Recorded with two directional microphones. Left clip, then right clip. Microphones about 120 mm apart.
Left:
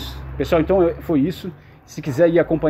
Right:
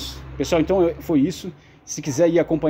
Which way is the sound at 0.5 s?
25° right (ahead or behind).